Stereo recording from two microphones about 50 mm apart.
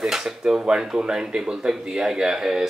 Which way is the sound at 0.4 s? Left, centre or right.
Centre.